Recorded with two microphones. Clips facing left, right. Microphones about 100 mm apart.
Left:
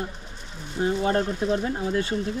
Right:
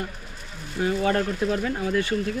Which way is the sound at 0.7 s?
25° left (ahead or behind).